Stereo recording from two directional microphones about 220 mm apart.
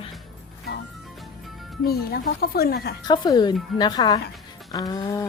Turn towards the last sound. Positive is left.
turn(degrees=15)  # may be behind; listen again after turning